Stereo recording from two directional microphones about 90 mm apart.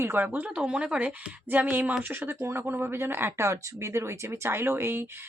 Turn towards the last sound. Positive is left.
turn(degrees=-25)  # may be behind; listen again after turning